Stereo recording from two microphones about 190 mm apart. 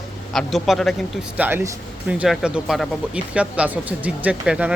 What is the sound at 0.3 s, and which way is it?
Speech, centre (ahead or behind).